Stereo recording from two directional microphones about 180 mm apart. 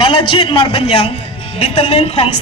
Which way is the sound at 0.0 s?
30° left (ahead or behind).